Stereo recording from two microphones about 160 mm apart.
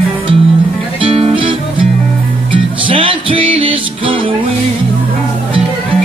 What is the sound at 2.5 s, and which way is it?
Music, 35° right (ahead or behind).